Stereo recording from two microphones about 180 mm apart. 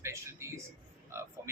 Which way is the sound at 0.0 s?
15° right (ahead or behind).